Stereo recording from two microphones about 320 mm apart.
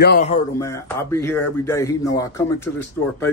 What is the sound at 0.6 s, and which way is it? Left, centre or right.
Speech, centre.